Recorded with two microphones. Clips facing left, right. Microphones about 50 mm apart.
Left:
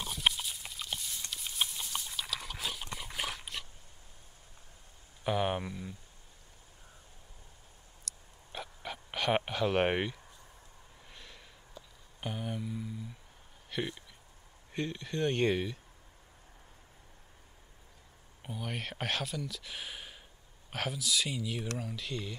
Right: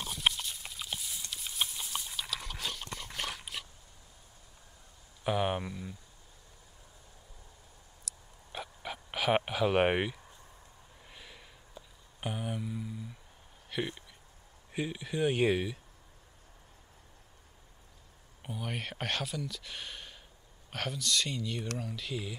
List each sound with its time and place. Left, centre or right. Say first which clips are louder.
0.0 s pig: even; centre
1.3 s dog: even; centre
5.2 s speech: right 1 dB; centre
8.0 s a sound: left 1 dB; centre
11.8 s a sound: even; right
12.2 s speech: right 1 dB; centre
18.4 s speech: right 1 dB; centre